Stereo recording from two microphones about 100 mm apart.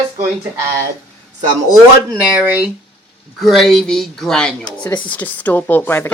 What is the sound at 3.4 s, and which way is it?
Speech, centre (ahead or behind).